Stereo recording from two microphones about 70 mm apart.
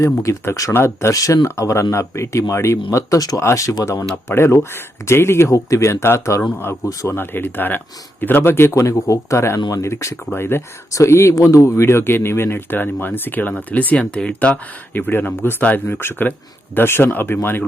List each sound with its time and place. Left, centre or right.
0.0 s speech: left
0.7 s speech: left
1.1 s speech: left
1.5 s speech: left
3.4 s speech: left
4.3 s speech: left
5.5 s speech: left
7.1 s speech: left
8.7 s speech: left